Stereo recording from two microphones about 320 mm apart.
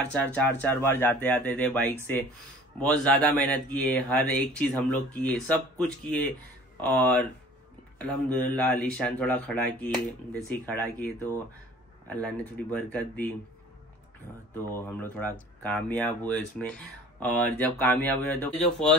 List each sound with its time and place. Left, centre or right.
0.0 s speech: centre
14.7 s speech: centre